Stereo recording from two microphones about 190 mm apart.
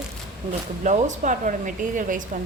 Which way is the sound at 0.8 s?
40° right (ahead or behind).